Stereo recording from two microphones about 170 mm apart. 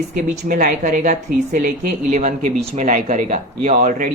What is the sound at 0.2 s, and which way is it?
Speech, 55° right (ahead or behind).